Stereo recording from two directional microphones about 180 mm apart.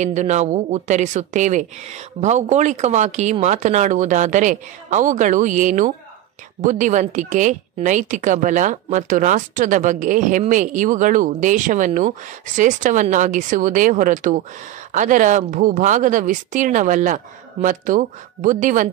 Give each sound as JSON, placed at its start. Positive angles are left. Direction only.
{"t": 0.0, "sound": "a woman's voice", "side_deg": -40}